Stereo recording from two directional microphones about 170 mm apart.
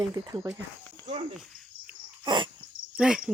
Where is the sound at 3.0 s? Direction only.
5° right (ahead or behind).